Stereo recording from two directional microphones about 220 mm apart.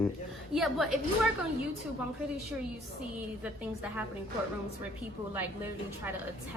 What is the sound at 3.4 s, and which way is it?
Speech, 10° right (ahead or behind).